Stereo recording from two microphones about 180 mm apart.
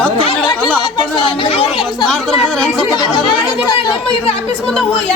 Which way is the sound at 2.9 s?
25° left (ahead or behind).